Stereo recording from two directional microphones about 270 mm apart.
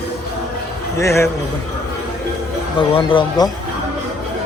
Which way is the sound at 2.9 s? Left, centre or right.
Centre.